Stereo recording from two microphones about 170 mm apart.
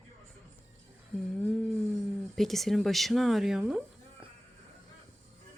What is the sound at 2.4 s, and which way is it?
Speech, centre (ahead or behind).